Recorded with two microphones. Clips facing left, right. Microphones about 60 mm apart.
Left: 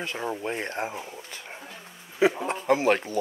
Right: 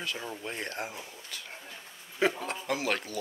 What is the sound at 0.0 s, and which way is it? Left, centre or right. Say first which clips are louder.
Speech: left 6 dB; left.